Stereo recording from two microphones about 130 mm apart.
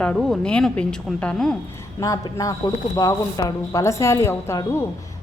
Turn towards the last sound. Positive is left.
turn(degrees=20)  # may be behind; listen again after turning